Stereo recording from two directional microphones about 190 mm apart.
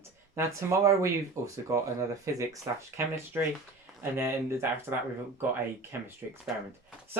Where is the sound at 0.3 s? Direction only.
15° right (ahead or behind).